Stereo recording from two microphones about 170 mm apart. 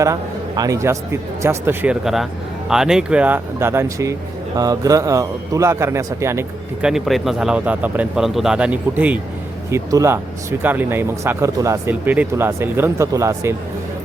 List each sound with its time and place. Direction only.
0.0 s a man's voice: 20° right (ahead or behind)
6.8 s speech: centre (ahead or behind); by 13.6 s 15° right (ahead or behind)